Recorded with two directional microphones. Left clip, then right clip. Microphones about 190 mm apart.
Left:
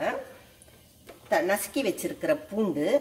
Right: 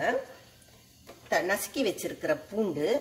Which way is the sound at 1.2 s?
35° left (ahead or behind).